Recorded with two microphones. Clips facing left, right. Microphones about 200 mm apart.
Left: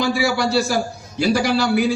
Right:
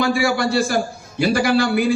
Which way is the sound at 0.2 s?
55° right (ahead or behind).